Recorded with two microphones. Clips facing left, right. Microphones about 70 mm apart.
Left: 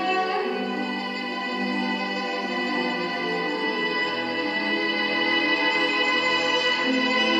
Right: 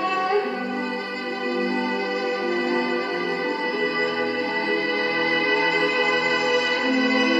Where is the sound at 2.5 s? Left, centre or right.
Right.